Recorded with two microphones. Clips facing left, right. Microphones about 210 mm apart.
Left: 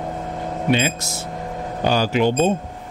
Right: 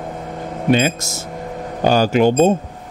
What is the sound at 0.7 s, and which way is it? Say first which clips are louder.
Speech: right 5 dB; 45° right (ahead or behind).